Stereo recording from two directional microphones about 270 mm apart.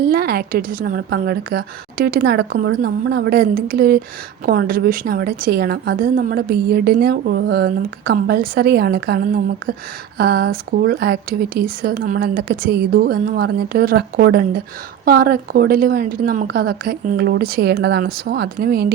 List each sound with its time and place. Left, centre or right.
0.0 s a woman's voice: right